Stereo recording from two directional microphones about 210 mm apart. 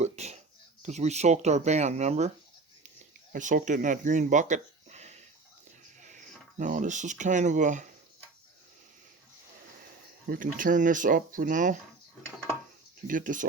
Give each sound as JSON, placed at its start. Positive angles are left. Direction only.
{"t": 0.0, "sound": "a sound", "side_deg": -30}
{"t": 0.8, "sound": "speech", "side_deg": -35}
{"t": 3.3, "sound": "speech", "side_deg": -35}
{"t": 10.2, "sound": "speech", "side_deg": -40}
{"t": 13.1, "sound": "speech", "side_deg": -40}